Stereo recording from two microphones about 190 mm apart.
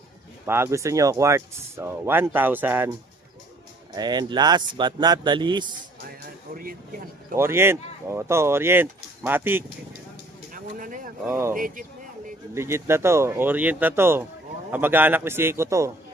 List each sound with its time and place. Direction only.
0.4 s speech: 10° right (ahead or behind)
3.9 s speech: 20° right (ahead or behind)
6.5 s speech: 50° right (ahead or behind)
7.3 s speech: 15° right (ahead or behind)
10.5 s a sound: 45° right (ahead or behind)
11.3 s speech: 15° right (ahead or behind)
11.5 s speech: 45° right (ahead or behind)
12.5 s speech: 15° right (ahead or behind)